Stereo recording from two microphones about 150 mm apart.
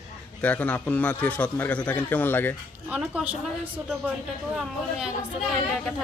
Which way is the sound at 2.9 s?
10° right (ahead or behind).